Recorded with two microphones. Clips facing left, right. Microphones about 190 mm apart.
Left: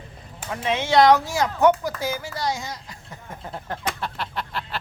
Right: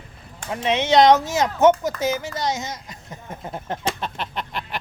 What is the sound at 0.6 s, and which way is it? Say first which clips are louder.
Speech: right 2 dB; 20° right (ahead or behind).